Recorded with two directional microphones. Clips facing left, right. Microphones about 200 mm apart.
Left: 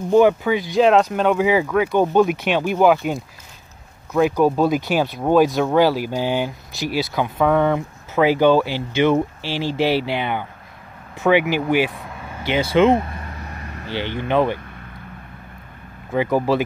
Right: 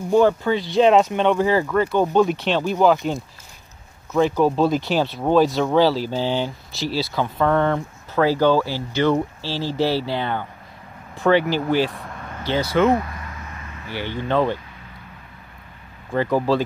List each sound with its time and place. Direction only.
0.1 s speech: 10° left (ahead or behind)
0.7 s speech: centre (ahead or behind)
4.4 s speech: 10° left (ahead or behind)
12.6 s vehicle: 25° left (ahead or behind); by 13.9 s 40° left (ahead or behind)
13.9 s speech: 20° left (ahead or behind)
16.1 s speech: 15° left (ahead or behind)